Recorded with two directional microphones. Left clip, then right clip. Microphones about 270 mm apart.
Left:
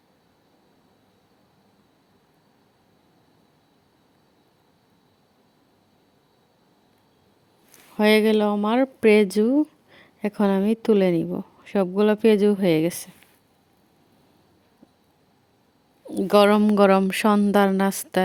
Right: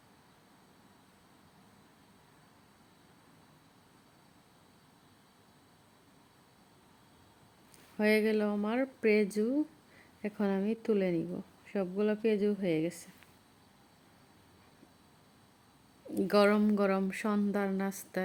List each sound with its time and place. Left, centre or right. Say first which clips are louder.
7.7 s speech: left 11 dB; left
16.0 s a woman's voice: left 10 dB; left